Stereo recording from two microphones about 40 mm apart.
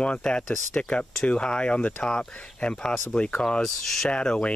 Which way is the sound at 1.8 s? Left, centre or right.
Left.